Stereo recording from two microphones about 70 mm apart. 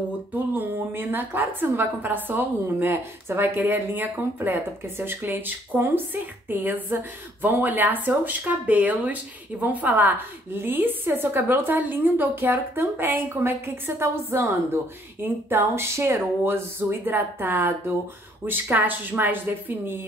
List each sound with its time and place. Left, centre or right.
0.3 s a woman's voice: right